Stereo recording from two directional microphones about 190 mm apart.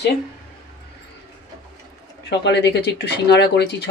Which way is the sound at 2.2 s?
65° left (ahead or behind).